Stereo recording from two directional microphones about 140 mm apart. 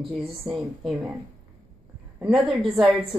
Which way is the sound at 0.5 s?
Centre (ahead or behind).